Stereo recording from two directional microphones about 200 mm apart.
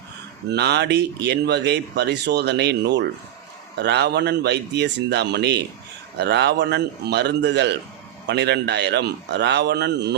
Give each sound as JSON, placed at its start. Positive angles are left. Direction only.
{"t": 0.5, "sound": "speech", "side_deg": -55}